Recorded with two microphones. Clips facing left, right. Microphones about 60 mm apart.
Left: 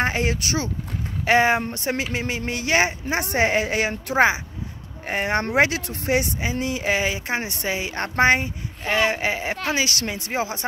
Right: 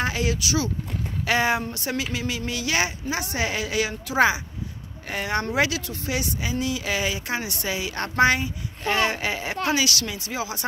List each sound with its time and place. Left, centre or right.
0.0 s speech: left
1.2 s speech: left
5.6 s speech: left